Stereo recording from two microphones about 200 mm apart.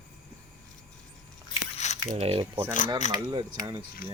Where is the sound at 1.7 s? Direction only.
35° left (ahead or behind).